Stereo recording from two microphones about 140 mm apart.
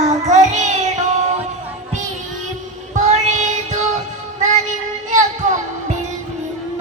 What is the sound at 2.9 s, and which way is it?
Child singing, 60° right (ahead or behind).